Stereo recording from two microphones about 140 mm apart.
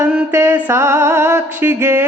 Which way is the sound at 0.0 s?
20° right (ahead or behind).